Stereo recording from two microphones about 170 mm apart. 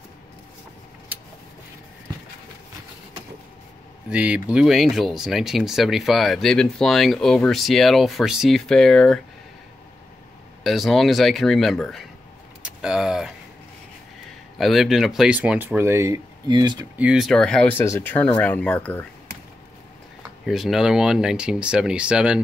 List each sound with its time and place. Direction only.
1.1 s vehicle: 10° right (ahead or behind)
4.1 s speech: 5° right (ahead or behind)
10.6 s speech: centre (ahead or behind)
12.6 s vehicle: 5° right (ahead or behind)
14.6 s speech: centre (ahead or behind); by 16.2 s 15° right (ahead or behind)
16.4 s speech: 25° right (ahead or behind)
16.9 s speech: 5° right (ahead or behind)
20.4 s speech: centre (ahead or behind)